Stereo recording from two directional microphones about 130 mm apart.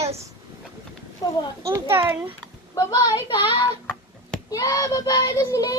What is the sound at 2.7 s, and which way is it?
Speech, 30° left (ahead or behind).